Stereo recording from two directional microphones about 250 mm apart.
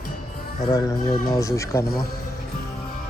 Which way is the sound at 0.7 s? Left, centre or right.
Centre.